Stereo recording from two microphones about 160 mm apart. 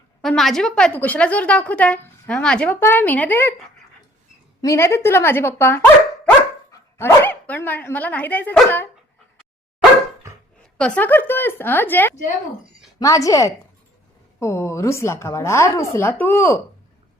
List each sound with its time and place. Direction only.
0.2 s a woman's voice: centre (ahead or behind)
4.6 s a woman's voice: 20° left (ahead or behind)
7.0 s a woman's voice: 15° left (ahead or behind)
10.6 s a woman's voice: 5° left (ahead or behind)